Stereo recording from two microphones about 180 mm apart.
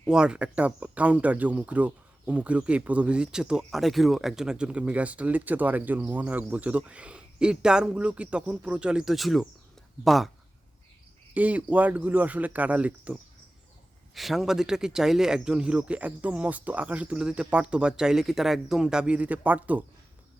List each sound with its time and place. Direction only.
0.1 s speech: 5° right (ahead or behind)
11.3 s speech: 10° right (ahead or behind)
14.2 s speech: centre (ahead or behind)